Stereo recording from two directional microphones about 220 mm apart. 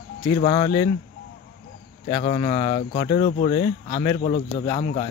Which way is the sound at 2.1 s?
25° left (ahead or behind).